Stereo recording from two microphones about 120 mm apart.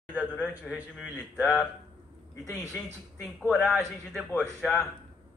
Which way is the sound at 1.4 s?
20° left (ahead or behind).